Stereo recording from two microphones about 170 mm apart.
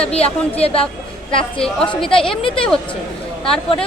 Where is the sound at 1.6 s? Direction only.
5° left (ahead or behind).